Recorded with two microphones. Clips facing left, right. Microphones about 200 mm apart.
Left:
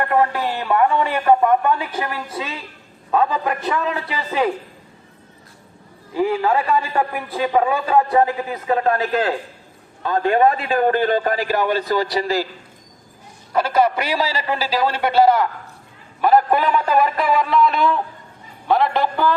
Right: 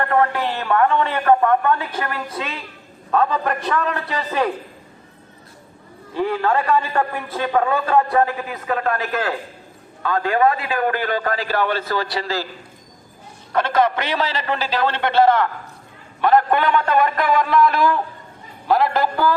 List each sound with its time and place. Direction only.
0.0 s a man's voice: 10° left (ahead or behind)
6.1 s a man's voice: 10° left (ahead or behind)
13.5 s a man's voice: 10° left (ahead or behind)